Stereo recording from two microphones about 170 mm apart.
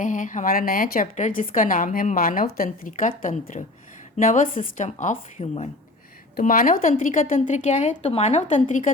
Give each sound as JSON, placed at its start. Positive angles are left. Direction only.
{"t": 0.0, "sound": "a woman's voice", "side_deg": 50}
{"t": 6.3, "sound": "a woman's voice", "side_deg": 60}